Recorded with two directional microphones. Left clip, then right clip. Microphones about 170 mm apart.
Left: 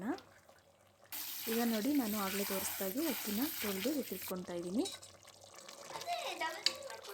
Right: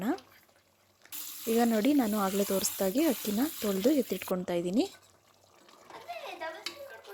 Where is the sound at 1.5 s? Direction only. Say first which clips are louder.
Right 9 dB; 45° right (ahead or behind).